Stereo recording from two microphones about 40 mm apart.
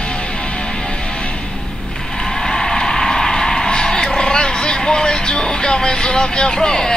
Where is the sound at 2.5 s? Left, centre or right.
Centre.